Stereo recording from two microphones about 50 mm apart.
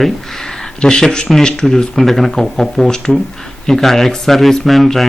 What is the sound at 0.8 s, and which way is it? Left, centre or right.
A man's voice, centre.